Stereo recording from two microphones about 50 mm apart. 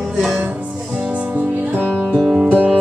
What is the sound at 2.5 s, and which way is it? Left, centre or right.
Music, right.